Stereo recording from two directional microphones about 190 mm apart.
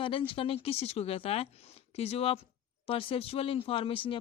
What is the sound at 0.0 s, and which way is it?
Speech, 25° left (ahead or behind).